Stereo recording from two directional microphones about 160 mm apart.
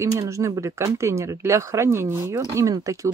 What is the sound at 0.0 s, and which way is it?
Speech, 20° right (ahead or behind).